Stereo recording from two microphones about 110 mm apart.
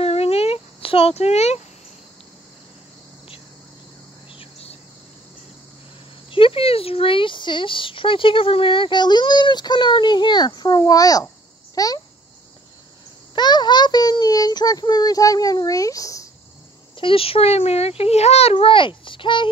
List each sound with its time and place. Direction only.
0.0 s a sound: 65° left (ahead or behind)
4.3 s cricket: 60° left (ahead or behind)
6.3 s a child's voice: 55° left (ahead or behind); by 12.0 s 35° left (ahead or behind)
13.3 s a child's voice: 40° left (ahead or behind)
16.9 s a child's voice: 55° left (ahead or behind)